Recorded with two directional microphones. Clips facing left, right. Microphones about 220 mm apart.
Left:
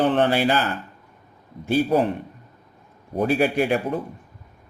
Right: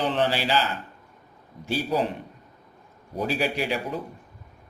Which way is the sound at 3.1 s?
55° left (ahead or behind).